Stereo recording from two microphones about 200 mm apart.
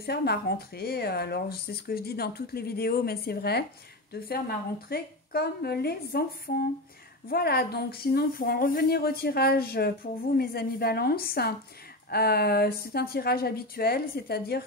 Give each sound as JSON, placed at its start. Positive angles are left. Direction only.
{"t": 0.0, "sound": "speech", "side_deg": 50}
{"t": 4.8, "sound": "speech", "side_deg": 50}